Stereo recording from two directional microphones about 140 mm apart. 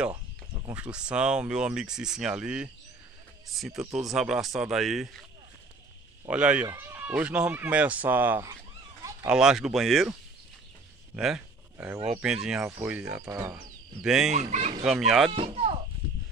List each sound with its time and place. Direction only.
0.7 s speech: 10° right (ahead or behind)
6.2 s speech: 10° right (ahead or behind)
11.1 s a sound: 5° right (ahead or behind)
12.1 s speech: 5° right (ahead or behind)
13.3 s speech: 25° right (ahead or behind)
14.0 s speech: 5° right (ahead or behind)
14.3 s speech: 55° right (ahead or behind)
14.9 s speech: centre (ahead or behind)
15.3 s speech: 45° right (ahead or behind)